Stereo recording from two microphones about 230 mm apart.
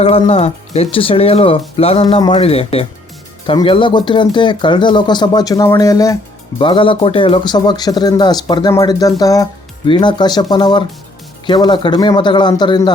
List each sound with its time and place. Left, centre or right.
0.0 s speech: left